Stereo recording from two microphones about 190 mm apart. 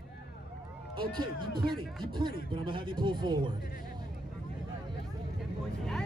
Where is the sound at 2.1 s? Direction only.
25° right (ahead or behind).